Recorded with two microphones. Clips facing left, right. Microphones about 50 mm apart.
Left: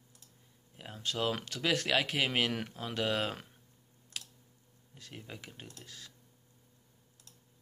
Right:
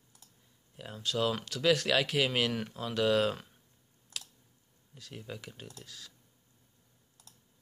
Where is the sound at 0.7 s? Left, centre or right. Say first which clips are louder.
Right 3 dB; centre.